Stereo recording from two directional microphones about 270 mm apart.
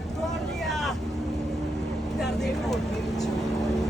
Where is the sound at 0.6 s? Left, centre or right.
Centre.